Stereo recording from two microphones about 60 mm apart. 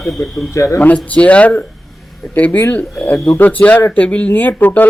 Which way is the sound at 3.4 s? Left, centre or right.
Left.